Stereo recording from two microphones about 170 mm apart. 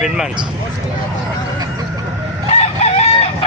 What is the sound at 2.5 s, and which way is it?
Chicken, 40° left (ahead or behind).